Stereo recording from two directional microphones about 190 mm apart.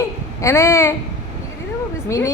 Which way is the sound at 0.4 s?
15° left (ahead or behind).